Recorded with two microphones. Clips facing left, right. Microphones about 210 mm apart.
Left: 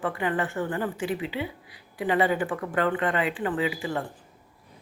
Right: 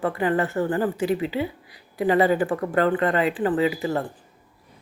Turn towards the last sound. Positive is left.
turn(degrees=-40)  # may be behind; listen again after turning